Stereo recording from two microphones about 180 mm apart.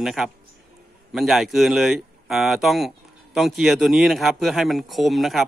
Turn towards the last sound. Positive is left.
turn(degrees=0)  # may be behind; listen again after turning